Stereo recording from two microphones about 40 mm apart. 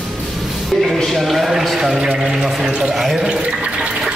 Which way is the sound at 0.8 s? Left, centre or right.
Centre.